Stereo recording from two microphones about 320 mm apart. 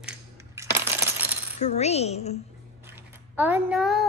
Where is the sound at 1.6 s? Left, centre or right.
Left.